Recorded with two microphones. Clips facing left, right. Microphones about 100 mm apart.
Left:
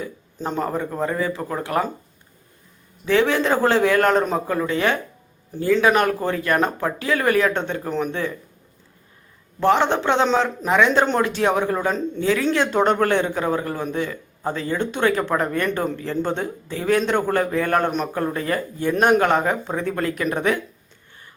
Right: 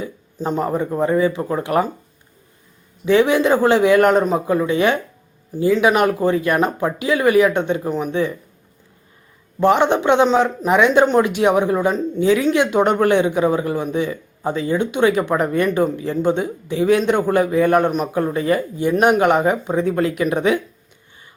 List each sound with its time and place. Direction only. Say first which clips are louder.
0.0 s speech: right 4 dB; 15° right (ahead or behind)
3.1 s speech: right 4 dB; 15° right (ahead or behind)
9.6 s speech: right 3 dB; 15° right (ahead or behind)